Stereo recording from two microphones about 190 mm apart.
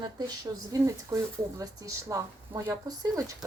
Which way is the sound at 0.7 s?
15° right (ahead or behind).